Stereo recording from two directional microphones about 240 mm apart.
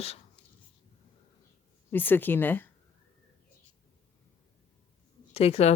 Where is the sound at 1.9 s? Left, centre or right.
Centre.